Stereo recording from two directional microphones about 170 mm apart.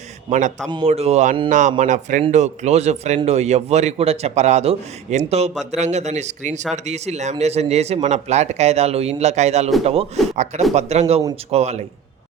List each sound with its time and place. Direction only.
0.3 s speech: 45° right (ahead or behind)
0.7 s a man's voice: 35° right (ahead or behind)